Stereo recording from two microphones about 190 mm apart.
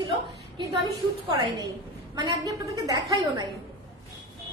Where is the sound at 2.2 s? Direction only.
20° right (ahead or behind).